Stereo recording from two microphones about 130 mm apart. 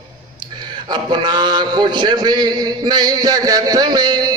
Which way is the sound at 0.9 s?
35° right (ahead or behind).